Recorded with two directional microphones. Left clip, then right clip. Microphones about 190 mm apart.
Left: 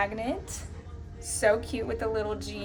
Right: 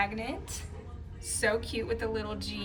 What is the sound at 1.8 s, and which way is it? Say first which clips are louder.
Speech: left 3 dB; 45° left (ahead or behind).